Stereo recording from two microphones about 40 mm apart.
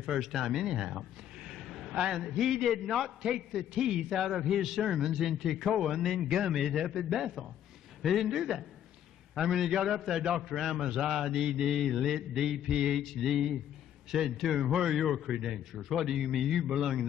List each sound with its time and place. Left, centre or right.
0.2 s a man's voice: centre
0.7 s a sound: centre
1.9 s speech: centre
2.1 s a man's voice: centre
3.2 s a man's voice: centre
6.2 s a man's voice: centre
10.5 s a man's voice: centre
10.8 s a man's voice: centre
11.8 s a man's voice: centre
12.1 s a man's voice: centre
14.6 s a man's voice: centre